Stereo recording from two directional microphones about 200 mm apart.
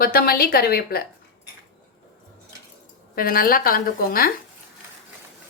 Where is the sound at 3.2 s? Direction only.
45° left (ahead or behind).